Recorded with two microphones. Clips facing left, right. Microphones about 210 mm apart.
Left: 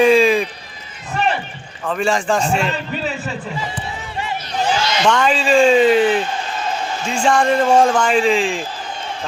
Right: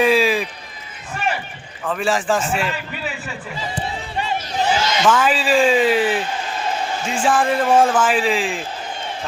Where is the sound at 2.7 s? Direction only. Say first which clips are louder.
Left 5 dB; 35° left (ahead or behind).